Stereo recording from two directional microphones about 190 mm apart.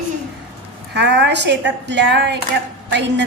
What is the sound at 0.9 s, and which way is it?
Speech, 65° right (ahead or behind).